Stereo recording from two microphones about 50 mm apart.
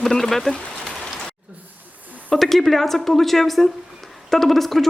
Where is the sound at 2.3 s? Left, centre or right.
Centre.